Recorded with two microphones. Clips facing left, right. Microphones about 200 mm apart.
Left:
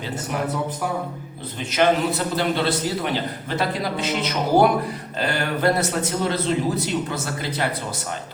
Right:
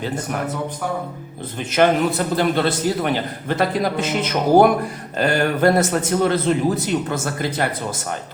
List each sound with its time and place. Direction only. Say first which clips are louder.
1.7 s a man's voice: right 3 dB; 50° right (ahead or behind)